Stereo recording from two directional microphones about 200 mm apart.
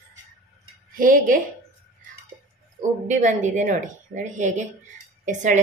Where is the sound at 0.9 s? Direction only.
40° right (ahead or behind).